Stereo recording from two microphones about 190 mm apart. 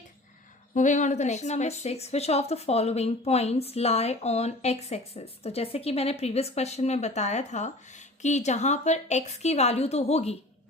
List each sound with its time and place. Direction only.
0.7 s a woman's voice: 40° left (ahead or behind)